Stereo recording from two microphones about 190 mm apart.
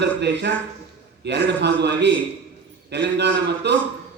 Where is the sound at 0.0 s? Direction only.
60° right (ahead or behind).